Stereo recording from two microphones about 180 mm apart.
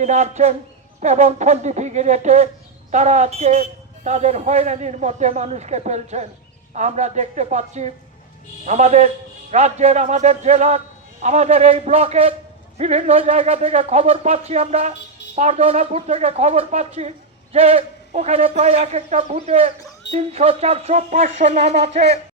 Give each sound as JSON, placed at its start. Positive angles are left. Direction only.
{"t": 0.0, "sound": "speech", "side_deg": -40}